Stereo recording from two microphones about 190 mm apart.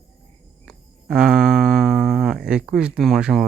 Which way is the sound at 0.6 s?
5° right (ahead or behind).